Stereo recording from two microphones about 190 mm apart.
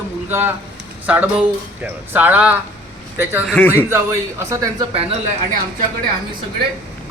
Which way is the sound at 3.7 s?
15° right (ahead or behind).